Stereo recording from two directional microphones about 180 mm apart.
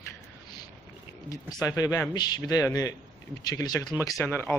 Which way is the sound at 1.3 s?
20° left (ahead or behind).